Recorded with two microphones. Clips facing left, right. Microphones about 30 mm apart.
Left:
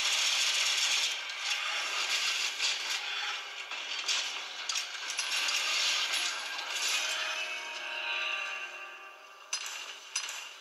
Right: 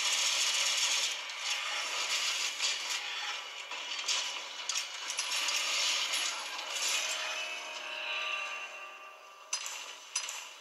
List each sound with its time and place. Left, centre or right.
0.0 s coin: centre